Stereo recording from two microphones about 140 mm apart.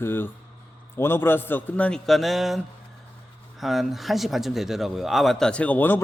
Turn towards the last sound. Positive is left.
turn(degrees=15)  # may be behind; listen again after turning